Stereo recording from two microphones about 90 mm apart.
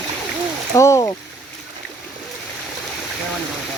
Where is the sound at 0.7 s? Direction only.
35° left (ahead or behind).